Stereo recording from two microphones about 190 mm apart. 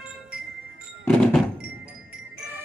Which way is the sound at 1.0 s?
5° left (ahead or behind).